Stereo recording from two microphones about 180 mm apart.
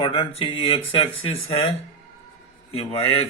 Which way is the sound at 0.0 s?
30° left (ahead or behind).